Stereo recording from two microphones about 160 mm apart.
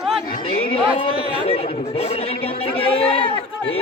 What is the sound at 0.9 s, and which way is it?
A man's voice, 35° left (ahead or behind).